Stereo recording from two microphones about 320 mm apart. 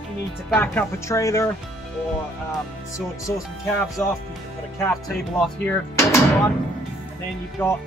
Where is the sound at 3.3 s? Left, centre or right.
Centre.